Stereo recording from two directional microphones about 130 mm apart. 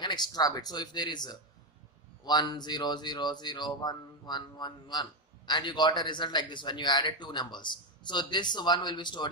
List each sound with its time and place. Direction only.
0.0 s speech: 35° left (ahead or behind)